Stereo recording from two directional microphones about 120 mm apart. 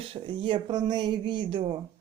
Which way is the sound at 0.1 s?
45° right (ahead or behind).